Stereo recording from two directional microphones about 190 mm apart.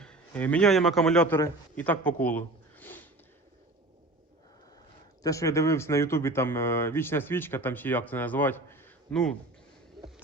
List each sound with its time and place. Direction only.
0.0 s a man's voice: 5° left (ahead or behind)
5.2 s speech: 15° left (ahead or behind)